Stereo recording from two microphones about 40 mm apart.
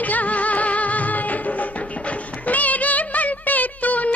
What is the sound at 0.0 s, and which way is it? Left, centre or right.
Music, left.